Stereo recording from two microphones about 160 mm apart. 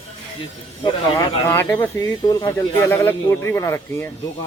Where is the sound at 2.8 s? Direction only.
15° left (ahead or behind).